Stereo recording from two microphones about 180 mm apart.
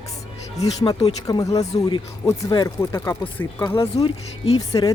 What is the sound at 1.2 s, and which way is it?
A woman's voice, 20° left (ahead or behind).